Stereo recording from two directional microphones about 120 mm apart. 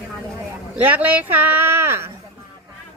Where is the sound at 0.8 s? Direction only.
15° right (ahead or behind).